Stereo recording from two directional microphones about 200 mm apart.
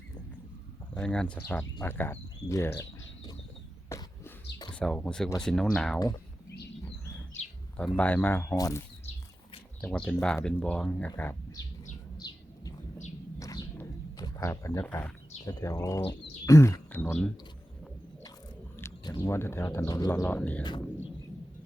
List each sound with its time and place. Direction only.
0.9 s speech: 5° left (ahead or behind)
3.8 s a sound: 15° left (ahead or behind)
4.7 s speech: 5° left (ahead or behind)
7.9 s speech: 10° left (ahead or behind)
9.8 s speech: 5° left (ahead or behind)
12.1 s thunder: 20° left (ahead or behind)
13.4 s wild animals: 15° left (ahead or behind)
15.4 s speech: 20° left (ahead or behind)
18.8 s speech: 15° left (ahead or behind)